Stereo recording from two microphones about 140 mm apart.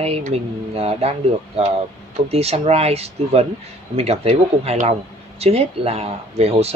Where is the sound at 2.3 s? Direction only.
45° right (ahead or behind).